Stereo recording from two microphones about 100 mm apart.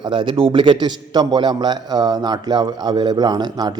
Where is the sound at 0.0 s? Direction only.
55° right (ahead or behind).